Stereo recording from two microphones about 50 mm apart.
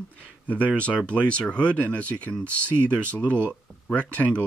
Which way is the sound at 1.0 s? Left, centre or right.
Left.